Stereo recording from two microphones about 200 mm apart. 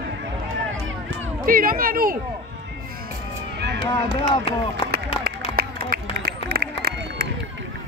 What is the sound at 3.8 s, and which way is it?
Speech, 25° left (ahead or behind).